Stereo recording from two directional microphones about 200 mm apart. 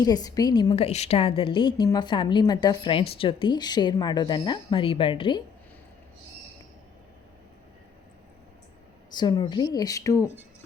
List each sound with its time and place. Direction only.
0.0 s a woman's voice: 20° left (ahead or behind)
0.9 s a woman's voice: 30° left (ahead or behind)
9.1 s a woman's voice: 20° left (ahead or behind)